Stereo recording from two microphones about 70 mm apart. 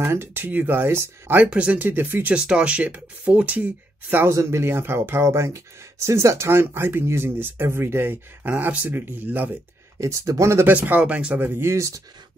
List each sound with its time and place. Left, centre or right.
0.0 s speech: right
1.5 s speech: centre
1.9 s speech: right
2.3 s speech: centre
4.3 s speech: right
9.9 s speech: right
10.7 s speech: right
11.6 s speech: right